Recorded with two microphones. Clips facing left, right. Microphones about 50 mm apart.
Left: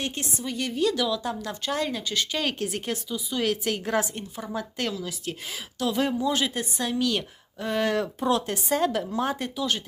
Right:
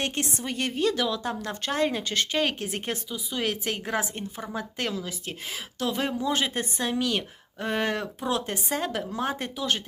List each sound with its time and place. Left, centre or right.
0.0 s a woman's voice: right
2.4 s a woman's voice: right